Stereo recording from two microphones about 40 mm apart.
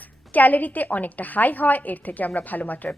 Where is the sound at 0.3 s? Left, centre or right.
Left.